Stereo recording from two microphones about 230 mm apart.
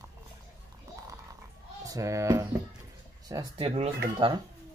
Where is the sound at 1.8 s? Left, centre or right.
Centre.